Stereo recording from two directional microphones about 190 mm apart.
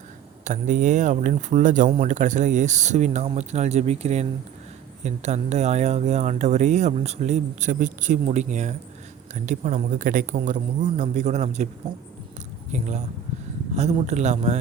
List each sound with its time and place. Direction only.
0.4 s speech: 40° right (ahead or behind)
12.7 s speech: 40° right (ahead or behind)